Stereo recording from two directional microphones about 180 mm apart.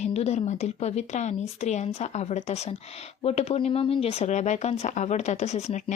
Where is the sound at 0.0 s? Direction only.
35° left (ahead or behind).